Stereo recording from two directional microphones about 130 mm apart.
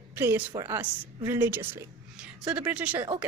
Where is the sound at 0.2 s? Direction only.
15° right (ahead or behind).